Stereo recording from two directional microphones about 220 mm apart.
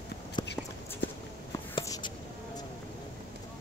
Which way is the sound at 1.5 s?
15° left (ahead or behind).